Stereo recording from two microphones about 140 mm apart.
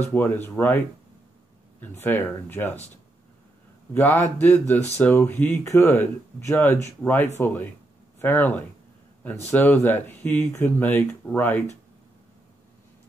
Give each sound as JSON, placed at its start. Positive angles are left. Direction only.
{"t": 0.1, "sound": "speech", "side_deg": 15}
{"t": 3.9, "sound": "speech", "side_deg": 15}